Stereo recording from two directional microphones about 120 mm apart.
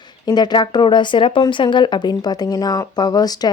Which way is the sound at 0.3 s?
35° left (ahead or behind).